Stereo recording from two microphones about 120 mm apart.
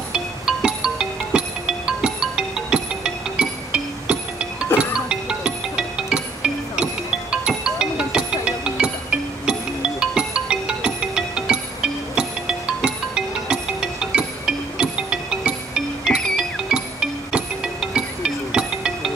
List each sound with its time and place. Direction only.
0.1 s music: 5° right (ahead or behind)